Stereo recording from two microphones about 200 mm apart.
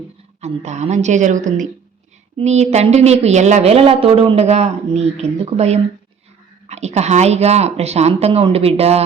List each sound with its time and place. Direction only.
0.4 s speech: 35° right (ahead or behind)